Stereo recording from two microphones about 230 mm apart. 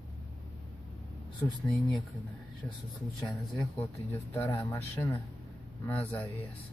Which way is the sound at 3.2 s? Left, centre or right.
Centre.